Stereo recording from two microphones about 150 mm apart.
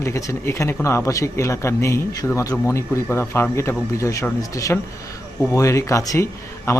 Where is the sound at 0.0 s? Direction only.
20° left (ahead or behind).